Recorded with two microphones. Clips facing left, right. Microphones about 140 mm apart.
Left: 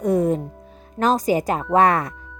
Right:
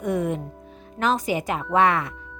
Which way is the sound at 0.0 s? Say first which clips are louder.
Left 6 dB; 35° left (ahead or behind).